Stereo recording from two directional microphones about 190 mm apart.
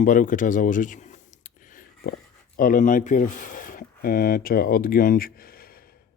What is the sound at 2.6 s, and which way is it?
Speech, 45° left (ahead or behind).